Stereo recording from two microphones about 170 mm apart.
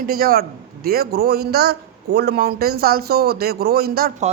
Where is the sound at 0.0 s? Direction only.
60° right (ahead or behind).